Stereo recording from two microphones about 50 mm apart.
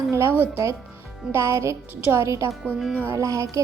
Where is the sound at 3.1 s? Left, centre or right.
Right.